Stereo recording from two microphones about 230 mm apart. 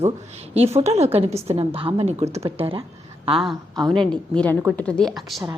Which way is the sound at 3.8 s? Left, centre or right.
Centre.